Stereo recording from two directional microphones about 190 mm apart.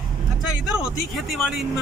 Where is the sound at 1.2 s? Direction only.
Centre (ahead or behind).